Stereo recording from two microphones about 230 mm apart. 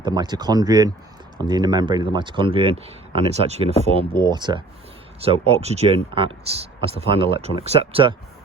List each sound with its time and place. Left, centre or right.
0.0 s speech: centre